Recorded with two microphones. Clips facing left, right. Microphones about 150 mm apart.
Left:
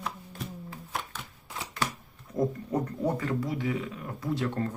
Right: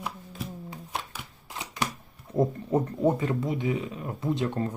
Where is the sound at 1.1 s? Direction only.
20° right (ahead or behind).